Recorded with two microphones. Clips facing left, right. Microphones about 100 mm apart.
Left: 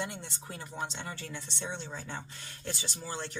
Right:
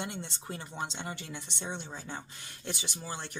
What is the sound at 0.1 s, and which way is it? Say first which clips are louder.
Speech: right 3 dB; 20° right (ahead or behind).